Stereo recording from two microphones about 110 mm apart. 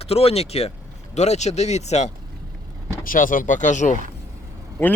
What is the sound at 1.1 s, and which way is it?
Speech, 90° left.